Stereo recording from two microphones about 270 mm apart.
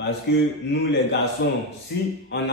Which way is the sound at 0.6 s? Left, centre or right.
Left.